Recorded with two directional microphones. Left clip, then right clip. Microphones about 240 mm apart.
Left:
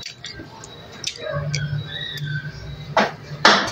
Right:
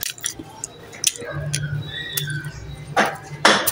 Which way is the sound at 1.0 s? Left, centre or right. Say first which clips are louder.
Right 6 dB; right.